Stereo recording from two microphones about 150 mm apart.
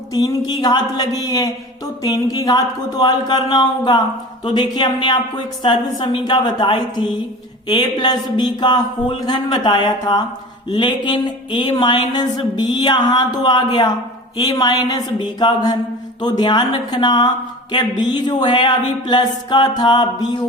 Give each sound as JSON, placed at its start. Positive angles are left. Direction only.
{"t": 0.1, "sound": "speech", "side_deg": 25}
{"t": 10.7, "sound": "a sound", "side_deg": 30}
{"t": 14.3, "sound": "speech", "side_deg": 25}